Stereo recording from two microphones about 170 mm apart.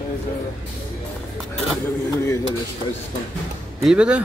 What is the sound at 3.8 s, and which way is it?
Speech, 5° right (ahead or behind).